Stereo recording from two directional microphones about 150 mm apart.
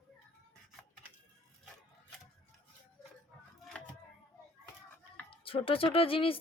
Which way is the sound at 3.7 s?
5° left (ahead or behind).